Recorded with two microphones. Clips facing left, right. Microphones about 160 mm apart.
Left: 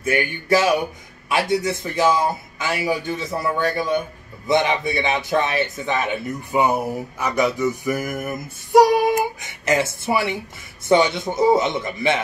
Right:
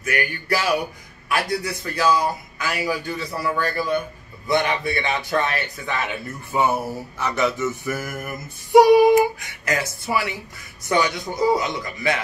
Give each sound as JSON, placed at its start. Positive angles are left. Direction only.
{"t": 0.0, "sound": "a man's voice", "side_deg": 25}
{"t": 6.5, "sound": "a sound", "side_deg": 15}
{"t": 8.7, "sound": "child singing", "side_deg": 0}
{"t": 9.4, "sound": "a man's voice", "side_deg": 20}